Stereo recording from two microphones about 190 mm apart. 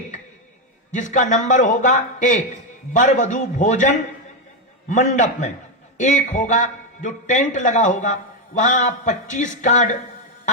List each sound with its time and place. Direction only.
0.9 s a man's voice: 40° left (ahead or behind)